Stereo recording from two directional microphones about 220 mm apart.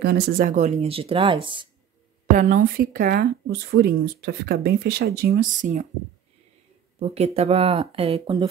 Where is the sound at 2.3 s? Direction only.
40° right (ahead or behind).